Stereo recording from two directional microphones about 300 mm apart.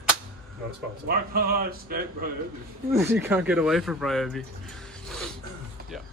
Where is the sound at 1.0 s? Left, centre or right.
Right.